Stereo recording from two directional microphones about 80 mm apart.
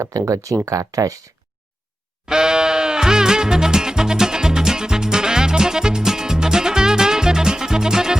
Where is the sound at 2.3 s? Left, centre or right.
Centre.